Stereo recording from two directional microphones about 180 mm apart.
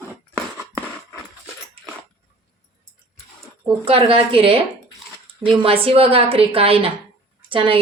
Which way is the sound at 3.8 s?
30° right (ahead or behind).